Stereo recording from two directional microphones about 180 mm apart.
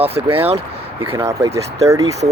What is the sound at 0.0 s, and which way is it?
Speech, 30° right (ahead or behind).